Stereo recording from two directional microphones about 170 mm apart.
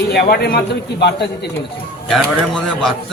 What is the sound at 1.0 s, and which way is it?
Speech, 75° left (ahead or behind).